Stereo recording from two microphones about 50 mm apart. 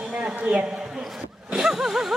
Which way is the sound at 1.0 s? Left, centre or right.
Centre.